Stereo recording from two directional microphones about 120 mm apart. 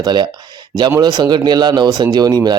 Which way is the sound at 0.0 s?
35° right (ahead or behind).